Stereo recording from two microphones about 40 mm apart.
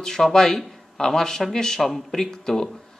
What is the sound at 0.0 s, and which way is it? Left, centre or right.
Speech, centre.